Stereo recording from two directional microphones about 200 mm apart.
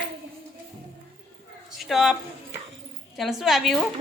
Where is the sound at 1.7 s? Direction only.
Centre (ahead or behind).